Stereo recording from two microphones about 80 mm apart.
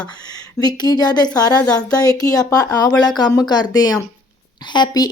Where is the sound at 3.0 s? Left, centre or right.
Left.